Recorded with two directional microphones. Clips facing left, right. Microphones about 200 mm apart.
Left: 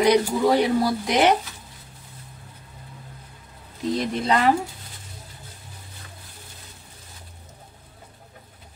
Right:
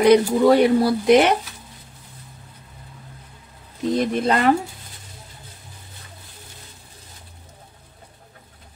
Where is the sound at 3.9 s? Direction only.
50° right (ahead or behind).